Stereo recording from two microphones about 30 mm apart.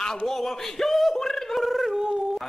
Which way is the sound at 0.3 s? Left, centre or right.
Centre.